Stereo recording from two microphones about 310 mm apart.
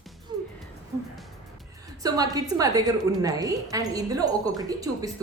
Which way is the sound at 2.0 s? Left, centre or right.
Centre.